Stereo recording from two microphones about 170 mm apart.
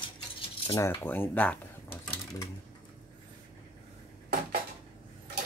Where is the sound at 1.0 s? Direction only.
10° left (ahead or behind).